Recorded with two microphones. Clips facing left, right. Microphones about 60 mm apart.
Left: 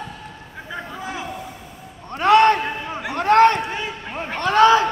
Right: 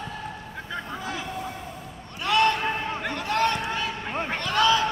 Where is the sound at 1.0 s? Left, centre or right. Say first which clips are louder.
Left 3 dB; centre.